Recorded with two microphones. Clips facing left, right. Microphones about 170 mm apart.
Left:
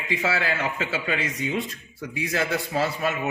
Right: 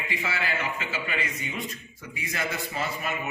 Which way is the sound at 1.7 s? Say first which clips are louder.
Left 6 dB; 75° left (ahead or behind).